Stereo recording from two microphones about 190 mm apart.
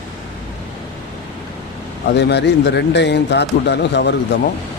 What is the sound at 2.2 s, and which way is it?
A man's voice, 60° left (ahead or behind).